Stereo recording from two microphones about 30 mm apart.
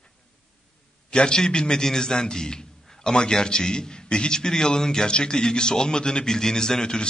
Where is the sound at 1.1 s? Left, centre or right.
Left.